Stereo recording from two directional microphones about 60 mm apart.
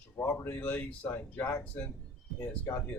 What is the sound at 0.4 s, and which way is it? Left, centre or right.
Speech, left.